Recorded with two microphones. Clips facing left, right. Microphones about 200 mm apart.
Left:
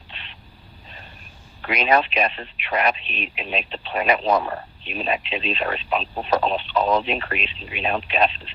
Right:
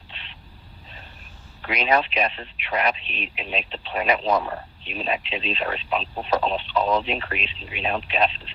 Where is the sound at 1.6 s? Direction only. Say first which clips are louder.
Left 2 dB; 55° left (ahead or behind).